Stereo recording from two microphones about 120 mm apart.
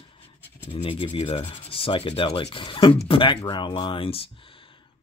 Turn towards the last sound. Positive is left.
turn(degrees=50)  # may be behind; listen again after turning